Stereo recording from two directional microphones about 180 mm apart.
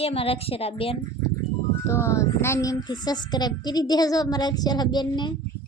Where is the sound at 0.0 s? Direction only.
35° left (ahead or behind).